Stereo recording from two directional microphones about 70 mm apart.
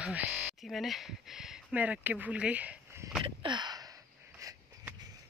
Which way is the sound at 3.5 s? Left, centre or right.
Right.